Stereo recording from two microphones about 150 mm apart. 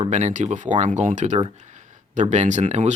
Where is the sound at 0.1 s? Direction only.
50° right (ahead or behind).